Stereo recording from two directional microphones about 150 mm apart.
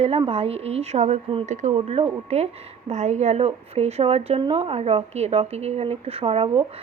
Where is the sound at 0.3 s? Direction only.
40° right (ahead or behind).